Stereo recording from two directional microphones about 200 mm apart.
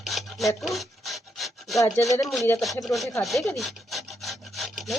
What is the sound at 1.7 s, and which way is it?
Speech, 15° left (ahead or behind).